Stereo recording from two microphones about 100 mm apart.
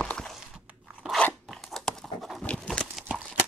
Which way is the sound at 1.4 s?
Centre (ahead or behind).